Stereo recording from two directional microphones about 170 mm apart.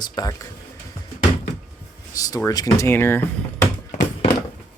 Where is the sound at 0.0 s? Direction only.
25° left (ahead or behind).